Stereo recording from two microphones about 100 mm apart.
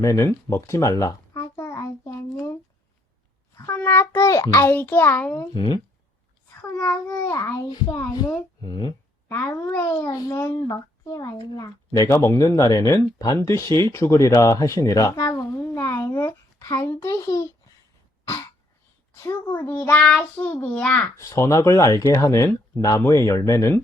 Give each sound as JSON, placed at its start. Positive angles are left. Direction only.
{"t": 0.0, "sound": "a sound", "side_deg": 30}
{"t": 3.7, "sound": "a child's voice", "side_deg": 20}
{"t": 4.7, "sound": "a child's voice", "side_deg": 20}
{"t": 5.5, "sound": "speech", "side_deg": 50}
{"t": 6.8, "sound": "a child's voice", "side_deg": 30}
{"t": 8.6, "sound": "speech", "side_deg": 45}
{"t": 9.3, "sound": "a child's voice", "side_deg": 20}
{"t": 15.3, "sound": "a sound", "side_deg": 25}
{"t": 19.7, "sound": "a child's voice", "side_deg": 20}
{"t": 20.0, "sound": "a child's voice", "side_deg": 5}
{"t": 20.3, "sound": "a child's voice", "side_deg": 20}
{"t": 21.2, "sound": "a child's voice", "side_deg": 30}